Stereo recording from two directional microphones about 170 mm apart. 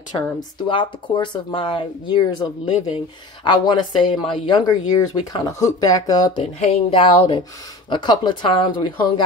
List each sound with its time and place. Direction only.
0.1 s speech: 25° left (ahead or behind)